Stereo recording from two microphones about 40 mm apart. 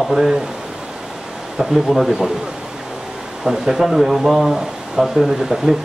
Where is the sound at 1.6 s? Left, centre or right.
Centre.